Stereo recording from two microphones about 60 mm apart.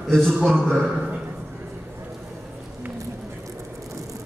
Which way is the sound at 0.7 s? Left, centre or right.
Centre.